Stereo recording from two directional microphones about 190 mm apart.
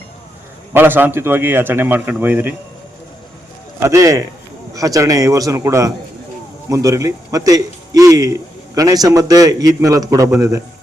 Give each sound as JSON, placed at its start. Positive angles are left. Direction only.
{"t": 0.7, "sound": "a man's voice", "side_deg": -10}
{"t": 3.8, "sound": "a man's voice", "side_deg": -15}